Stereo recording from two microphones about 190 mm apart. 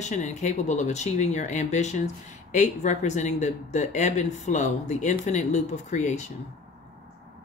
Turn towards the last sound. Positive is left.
turn(degrees=40)  # may be behind; listen again after turning